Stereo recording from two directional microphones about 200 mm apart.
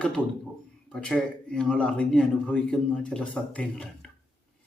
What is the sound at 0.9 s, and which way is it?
Speech, 5° left (ahead or behind).